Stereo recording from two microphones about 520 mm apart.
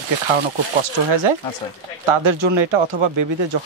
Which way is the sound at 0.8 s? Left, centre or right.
Right.